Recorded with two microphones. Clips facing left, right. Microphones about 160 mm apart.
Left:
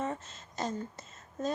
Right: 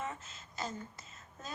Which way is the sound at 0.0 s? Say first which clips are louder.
Left 6 dB; 40° left (ahead or behind).